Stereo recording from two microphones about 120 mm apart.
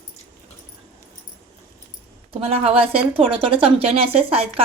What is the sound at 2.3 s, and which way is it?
A woman's voice, 55° right (ahead or behind).